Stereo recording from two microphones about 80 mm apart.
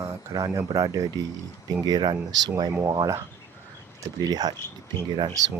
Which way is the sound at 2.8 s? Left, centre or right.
Right.